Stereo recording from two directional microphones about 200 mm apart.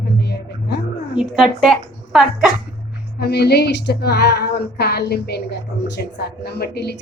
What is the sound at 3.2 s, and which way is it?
Speech, 55° left (ahead or behind).